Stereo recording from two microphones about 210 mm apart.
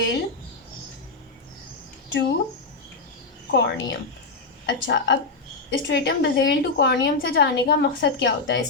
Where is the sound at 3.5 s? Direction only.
55° left (ahead or behind).